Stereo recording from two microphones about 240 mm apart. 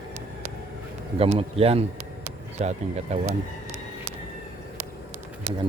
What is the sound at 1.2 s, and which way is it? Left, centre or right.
Speech, right.